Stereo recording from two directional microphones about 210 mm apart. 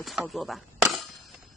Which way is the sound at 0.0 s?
Centre (ahead or behind).